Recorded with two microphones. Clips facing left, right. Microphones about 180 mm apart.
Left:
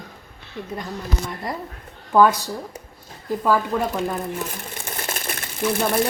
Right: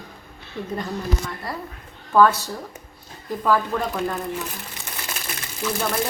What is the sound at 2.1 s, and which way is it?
A woman's voice, 15° left (ahead or behind).